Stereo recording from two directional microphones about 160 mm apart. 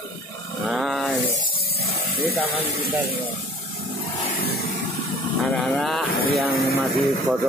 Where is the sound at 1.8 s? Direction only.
75° left (ahead or behind).